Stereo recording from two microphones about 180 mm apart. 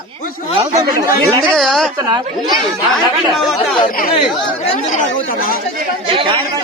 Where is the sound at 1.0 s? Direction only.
15° right (ahead or behind).